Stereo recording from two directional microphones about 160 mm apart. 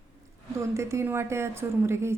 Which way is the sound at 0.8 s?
20° right (ahead or behind).